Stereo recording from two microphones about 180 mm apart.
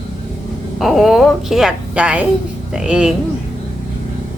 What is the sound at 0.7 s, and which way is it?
A woman's voice, centre (ahead or behind).